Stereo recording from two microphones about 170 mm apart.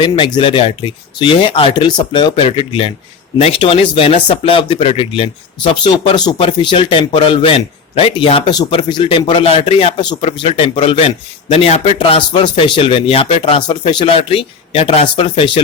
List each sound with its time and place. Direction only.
0.3 s speech: 30° left (ahead or behind)